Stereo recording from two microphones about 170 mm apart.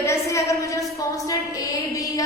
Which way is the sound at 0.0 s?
15° left (ahead or behind).